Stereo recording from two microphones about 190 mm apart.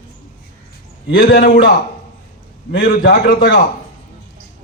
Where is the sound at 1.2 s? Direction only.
65° left (ahead or behind).